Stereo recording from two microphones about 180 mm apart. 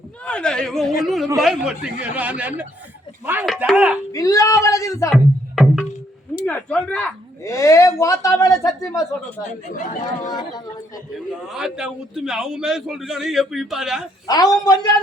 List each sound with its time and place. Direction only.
0.3 s a man's voice: 5° left (ahead or behind)
4.1 s speech: 20° left (ahead or behind)
5.1 s music: centre (ahead or behind)
6.4 s speech: 5° left (ahead or behind)
7.4 s speech: 15° left (ahead or behind)
9.4 s speech: 45° left (ahead or behind)
10.2 s a man's voice: 20° left (ahead or behind)
11.4 s a man's voice: 5° right (ahead or behind)
14.3 s a man's voice: 20° left (ahead or behind)